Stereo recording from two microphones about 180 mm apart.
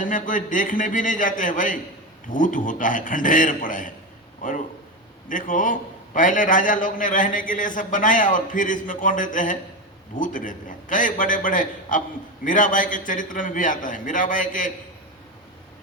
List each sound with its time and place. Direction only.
0.0 s a man's voice: 45° left (ahead or behind)
5.3 s a man's voice: 45° left (ahead or behind)